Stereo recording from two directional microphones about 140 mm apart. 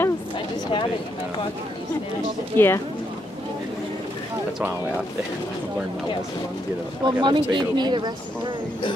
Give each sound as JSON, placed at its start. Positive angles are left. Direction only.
{"t": 2.5, "sound": "speech", "side_deg": 15}
{"t": 7.1, "sound": "speech", "side_deg": -30}